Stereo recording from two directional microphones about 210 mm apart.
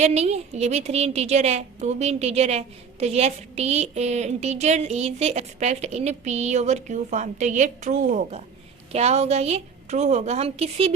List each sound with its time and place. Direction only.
0.0 s a woman's voice: 30° right (ahead or behind)